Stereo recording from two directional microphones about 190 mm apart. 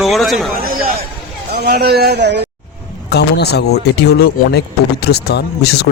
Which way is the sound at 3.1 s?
60° left (ahead or behind).